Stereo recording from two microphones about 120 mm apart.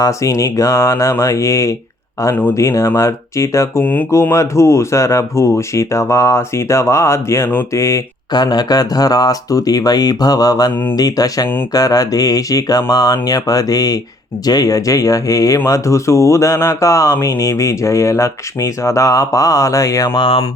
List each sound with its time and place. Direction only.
0.0 s speech: 25° left (ahead or behind)